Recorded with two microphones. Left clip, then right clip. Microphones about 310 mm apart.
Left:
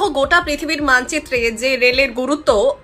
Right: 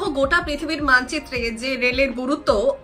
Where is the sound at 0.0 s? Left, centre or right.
Centre.